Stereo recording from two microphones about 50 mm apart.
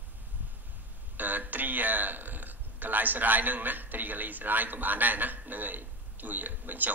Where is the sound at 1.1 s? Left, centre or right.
Right.